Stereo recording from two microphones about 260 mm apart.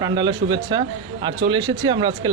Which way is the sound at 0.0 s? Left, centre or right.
Centre.